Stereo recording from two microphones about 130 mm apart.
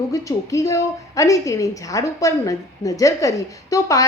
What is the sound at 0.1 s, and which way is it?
A woman's voice, 25° left (ahead or behind).